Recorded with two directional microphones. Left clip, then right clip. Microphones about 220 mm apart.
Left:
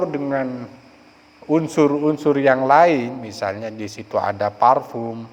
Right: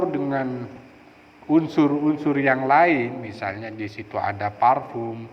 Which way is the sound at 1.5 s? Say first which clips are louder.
Left 3 dB; 50° left (ahead or behind).